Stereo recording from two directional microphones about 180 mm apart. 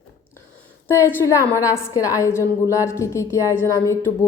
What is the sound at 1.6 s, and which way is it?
A woman's voice, 15° left (ahead or behind).